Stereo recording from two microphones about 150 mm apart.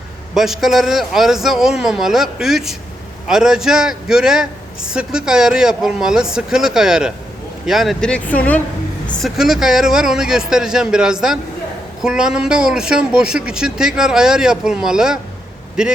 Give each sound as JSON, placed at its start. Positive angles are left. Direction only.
{"t": 0.3, "sound": "a man's voice", "side_deg": 0}
{"t": 9.1, "sound": "a man's voice", "side_deg": 0}